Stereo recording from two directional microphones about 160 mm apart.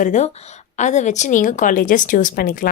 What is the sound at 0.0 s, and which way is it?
A woman's voice, 50° left (ahead or behind).